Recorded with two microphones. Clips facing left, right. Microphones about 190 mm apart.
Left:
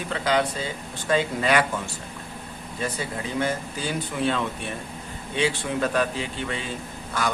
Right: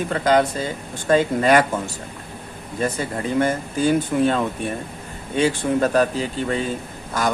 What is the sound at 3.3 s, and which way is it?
Speech, 50° right (ahead or behind).